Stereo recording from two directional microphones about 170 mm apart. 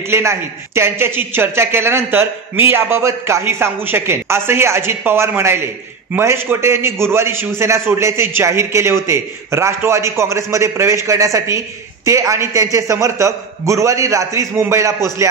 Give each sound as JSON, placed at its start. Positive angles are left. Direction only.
{"t": 0.1, "sound": "a man's voice", "side_deg": -15}